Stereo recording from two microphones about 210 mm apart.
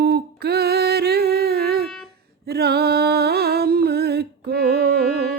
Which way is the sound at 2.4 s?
50° right (ahead or behind).